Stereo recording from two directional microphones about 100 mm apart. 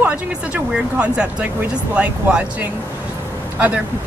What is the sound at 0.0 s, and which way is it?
Speech, 15° right (ahead or behind).